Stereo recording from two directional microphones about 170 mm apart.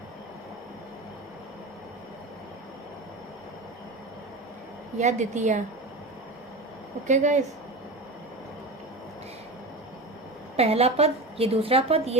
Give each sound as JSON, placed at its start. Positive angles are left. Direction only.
{"t": 4.9, "sound": "a woman's voice", "side_deg": -45}
{"t": 7.1, "sound": "a woman's voice", "side_deg": -45}
{"t": 10.6, "sound": "a woman's voice", "side_deg": -35}